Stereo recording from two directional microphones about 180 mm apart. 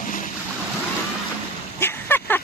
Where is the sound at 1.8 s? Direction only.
10° left (ahead or behind).